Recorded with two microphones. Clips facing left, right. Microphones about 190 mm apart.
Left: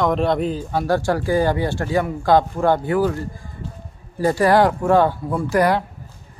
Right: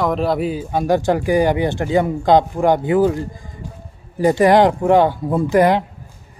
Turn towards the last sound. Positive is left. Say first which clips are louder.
# right 4 dB
turn(degrees=-20)  # may be behind; listen again after turning